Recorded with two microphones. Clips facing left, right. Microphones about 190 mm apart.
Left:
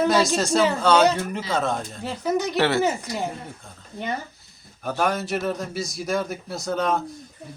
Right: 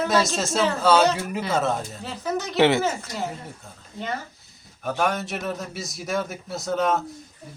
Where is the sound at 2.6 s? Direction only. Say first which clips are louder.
Right 5 dB; 15° right (ahead or behind).